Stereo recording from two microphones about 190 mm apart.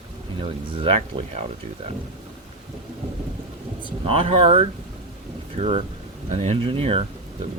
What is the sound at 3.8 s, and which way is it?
Speech, 30° right (ahead or behind).